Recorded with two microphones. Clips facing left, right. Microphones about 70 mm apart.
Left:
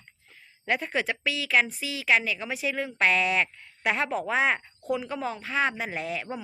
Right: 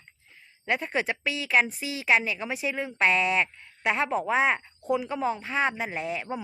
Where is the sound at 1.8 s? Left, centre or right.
Right.